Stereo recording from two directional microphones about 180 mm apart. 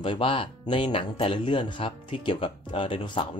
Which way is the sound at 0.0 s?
30° left (ahead or behind).